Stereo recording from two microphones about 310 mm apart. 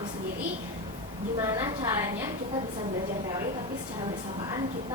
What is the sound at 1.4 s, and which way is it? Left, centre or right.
Speech, centre.